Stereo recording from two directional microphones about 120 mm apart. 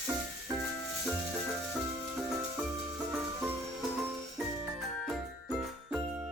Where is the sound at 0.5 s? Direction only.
20° right (ahead or behind).